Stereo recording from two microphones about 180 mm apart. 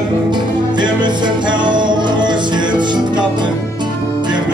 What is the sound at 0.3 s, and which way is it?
Music, 25° right (ahead or behind).